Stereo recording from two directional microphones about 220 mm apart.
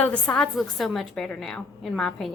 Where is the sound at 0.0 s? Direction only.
5° left (ahead or behind).